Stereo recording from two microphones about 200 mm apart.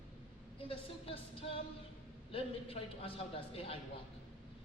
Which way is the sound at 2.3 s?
30° left (ahead or behind).